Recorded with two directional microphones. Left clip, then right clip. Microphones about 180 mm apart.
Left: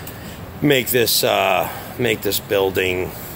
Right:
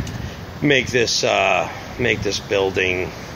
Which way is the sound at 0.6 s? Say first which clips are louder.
Even; 20° left (ahead or behind).